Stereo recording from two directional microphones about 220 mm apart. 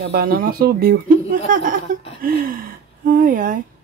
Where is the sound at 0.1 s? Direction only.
40° right (ahead or behind).